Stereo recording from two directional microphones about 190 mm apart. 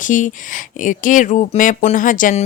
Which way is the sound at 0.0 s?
40° left (ahead or behind).